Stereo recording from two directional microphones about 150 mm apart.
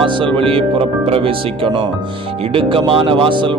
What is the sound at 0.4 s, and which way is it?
Speech, 40° right (ahead or behind).